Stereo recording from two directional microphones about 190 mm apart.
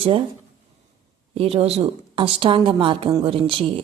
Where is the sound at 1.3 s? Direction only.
30° right (ahead or behind).